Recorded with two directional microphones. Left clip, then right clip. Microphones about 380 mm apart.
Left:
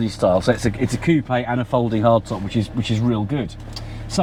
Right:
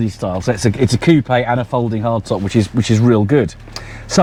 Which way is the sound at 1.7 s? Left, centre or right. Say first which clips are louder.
Left 1 dB; centre.